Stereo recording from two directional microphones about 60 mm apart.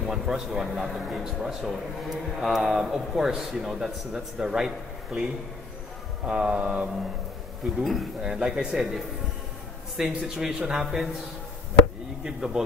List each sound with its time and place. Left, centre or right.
0.0 s speech: centre
7.8 s speech: centre
12.3 s speech: centre